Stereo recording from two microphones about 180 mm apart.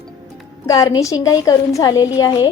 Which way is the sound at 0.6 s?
20° left (ahead or behind).